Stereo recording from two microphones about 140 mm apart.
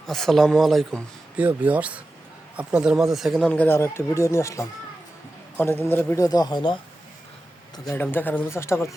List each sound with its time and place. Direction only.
0.1 s speech: centre (ahead or behind)
1.4 s speech: 10° right (ahead or behind); by 6.2 s 15° left (ahead or behind)
6.2 s speech: 25° left (ahead or behind)
7.9 s speech: 15° left (ahead or behind)